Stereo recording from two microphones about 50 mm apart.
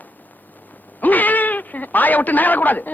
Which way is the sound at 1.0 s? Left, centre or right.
Left.